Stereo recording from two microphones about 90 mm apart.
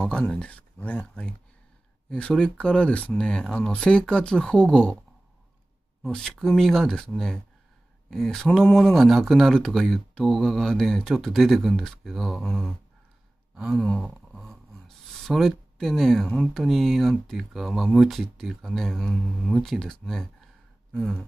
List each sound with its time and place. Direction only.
0.0 s speech: 10° left (ahead or behind)
6.1 s speech: 5° left (ahead or behind)
8.5 s speech: 15° left (ahead or behind)
8.7 s speech: 5° left (ahead or behind)
13.7 s speech: 10° left (ahead or behind)
14.3 s a sound: centre (ahead or behind)
15.0 s speech: 5° left (ahead or behind)